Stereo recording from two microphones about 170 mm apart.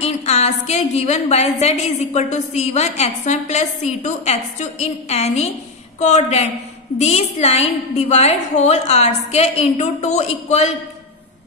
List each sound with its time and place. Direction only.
0.0 s a woman's voice: 40° left (ahead or behind)